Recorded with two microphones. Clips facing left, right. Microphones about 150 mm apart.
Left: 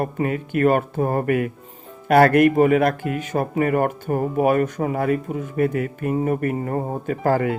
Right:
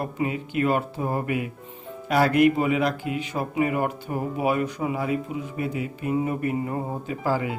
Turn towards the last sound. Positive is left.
turn(degrees=55)  # may be behind; listen again after turning